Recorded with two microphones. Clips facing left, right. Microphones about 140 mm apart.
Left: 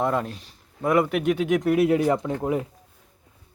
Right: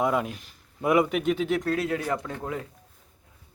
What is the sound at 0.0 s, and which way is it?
Speech, 5° right (ahead or behind).